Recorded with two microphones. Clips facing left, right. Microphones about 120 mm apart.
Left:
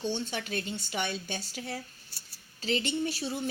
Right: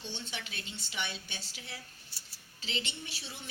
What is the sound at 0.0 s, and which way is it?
Speech, 45° left (ahead or behind).